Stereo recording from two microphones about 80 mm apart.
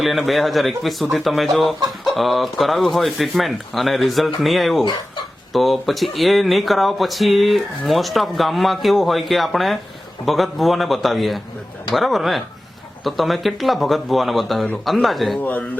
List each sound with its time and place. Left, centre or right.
0.0 s speech: centre
15.4 s speech: left